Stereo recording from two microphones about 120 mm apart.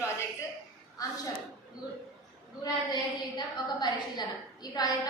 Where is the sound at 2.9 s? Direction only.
40° left (ahead or behind).